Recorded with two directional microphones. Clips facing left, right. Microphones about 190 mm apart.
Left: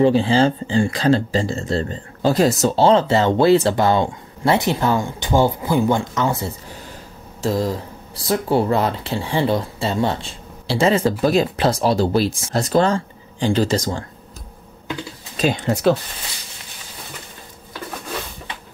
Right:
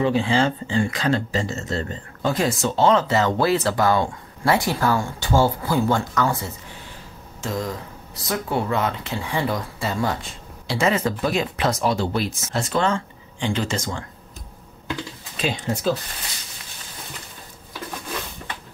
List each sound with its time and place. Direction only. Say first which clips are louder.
0.0 s speech: left 5 dB; 35° left (ahead or behind)
7.4 s speech: left 7 dB; 35° left (ahead or behind)
15.5 s speech: left 6 dB; 70° left (ahead or behind)